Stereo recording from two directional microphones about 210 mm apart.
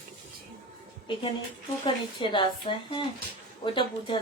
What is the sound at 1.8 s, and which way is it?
Speech, 25° left (ahead or behind).